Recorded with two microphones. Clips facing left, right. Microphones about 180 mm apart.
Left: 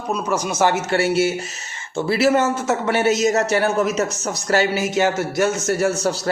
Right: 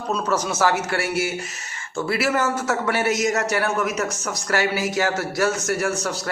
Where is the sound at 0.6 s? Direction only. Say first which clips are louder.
Left 6 dB; 25° left (ahead or behind).